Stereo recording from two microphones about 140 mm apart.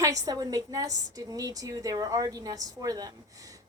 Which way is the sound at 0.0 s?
25° right (ahead or behind).